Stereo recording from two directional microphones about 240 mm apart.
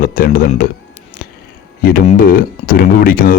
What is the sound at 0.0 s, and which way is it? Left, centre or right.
Speech, left.